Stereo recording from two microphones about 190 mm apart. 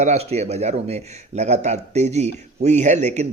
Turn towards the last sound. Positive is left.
turn(degrees=-35)  # may be behind; listen again after turning